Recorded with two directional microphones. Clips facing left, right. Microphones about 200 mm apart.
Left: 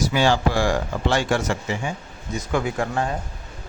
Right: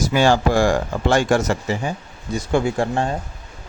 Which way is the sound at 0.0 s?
45° right (ahead or behind).